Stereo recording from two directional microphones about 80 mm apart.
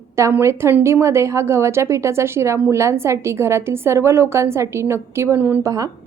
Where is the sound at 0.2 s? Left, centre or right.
Right.